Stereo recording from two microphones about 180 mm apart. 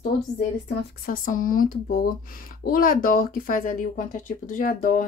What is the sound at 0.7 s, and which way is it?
A woman's voice, 55° left (ahead or behind).